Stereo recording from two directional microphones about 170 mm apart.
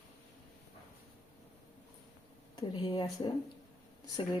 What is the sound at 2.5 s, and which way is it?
Speech, 25° left (ahead or behind).